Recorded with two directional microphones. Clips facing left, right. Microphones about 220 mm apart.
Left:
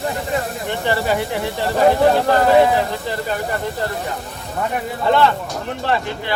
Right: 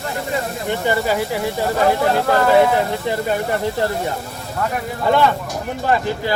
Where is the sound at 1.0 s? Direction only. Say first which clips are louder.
Right 1 dB; centre (ahead or behind).